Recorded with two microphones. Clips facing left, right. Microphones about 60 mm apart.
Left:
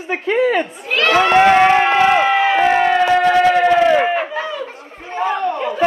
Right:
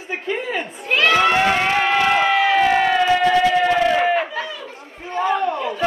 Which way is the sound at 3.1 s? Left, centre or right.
Left.